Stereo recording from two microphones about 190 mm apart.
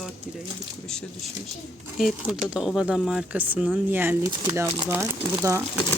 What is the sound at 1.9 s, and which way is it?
Speech, 5° right (ahead or behind).